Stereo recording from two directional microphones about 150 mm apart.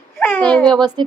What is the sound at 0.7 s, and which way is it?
Speech, 30° right (ahead or behind).